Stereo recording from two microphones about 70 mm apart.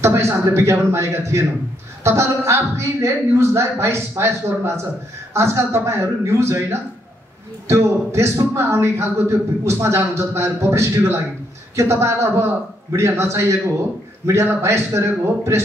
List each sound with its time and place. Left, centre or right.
0.0 s a man's voice: right